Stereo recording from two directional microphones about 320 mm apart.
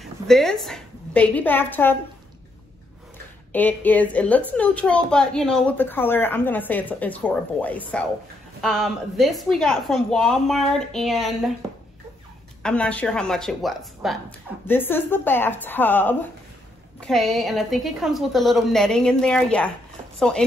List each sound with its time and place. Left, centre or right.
0.0 s a woman's voice: centre
3.5 s a woman's voice: centre
12.6 s a woman's voice: centre